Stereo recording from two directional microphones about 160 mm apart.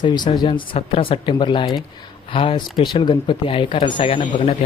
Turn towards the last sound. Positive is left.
turn(degrees=40)  # may be behind; listen again after turning